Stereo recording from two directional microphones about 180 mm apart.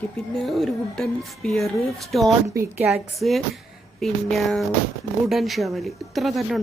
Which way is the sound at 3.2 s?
Centre (ahead or behind).